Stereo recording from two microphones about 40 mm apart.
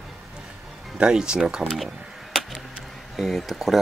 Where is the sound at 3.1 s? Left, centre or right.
Centre.